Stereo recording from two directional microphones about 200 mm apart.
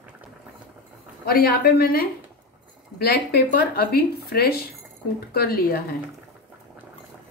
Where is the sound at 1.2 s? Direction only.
45° left (ahead or behind).